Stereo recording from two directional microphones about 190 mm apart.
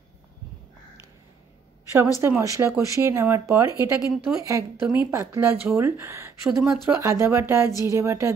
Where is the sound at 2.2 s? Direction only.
15° right (ahead or behind).